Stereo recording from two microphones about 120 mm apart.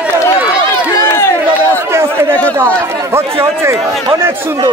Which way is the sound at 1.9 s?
20° right (ahead or behind).